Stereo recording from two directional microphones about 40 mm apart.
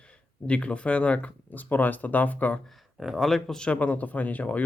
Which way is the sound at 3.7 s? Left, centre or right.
Left.